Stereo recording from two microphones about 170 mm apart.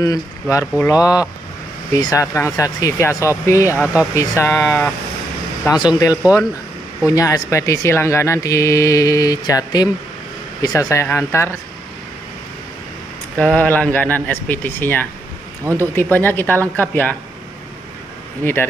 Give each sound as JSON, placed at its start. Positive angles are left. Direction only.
{"t": 0.0, "sound": "speech", "side_deg": 20}
{"t": 3.7, "sound": "speech", "side_deg": -5}
{"t": 4.1, "sound": "speech", "side_deg": 15}
{"t": 5.7, "sound": "speech", "side_deg": 25}
{"t": 7.2, "sound": "speech", "side_deg": 20}
{"t": 13.4, "sound": "speech", "side_deg": 10}
{"t": 18.4, "sound": "speech", "side_deg": 10}